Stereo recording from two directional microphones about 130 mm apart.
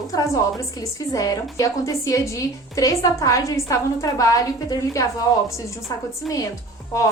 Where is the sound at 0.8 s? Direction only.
25° left (ahead or behind).